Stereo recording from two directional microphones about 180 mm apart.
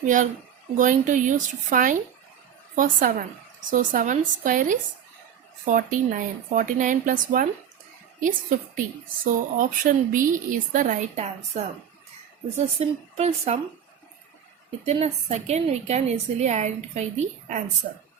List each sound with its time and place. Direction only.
0.8 s a woman's voice: 45° right (ahead or behind)
12.8 s a woman's voice: 35° right (ahead or behind)
14.8 s a woman's voice: 35° right (ahead or behind)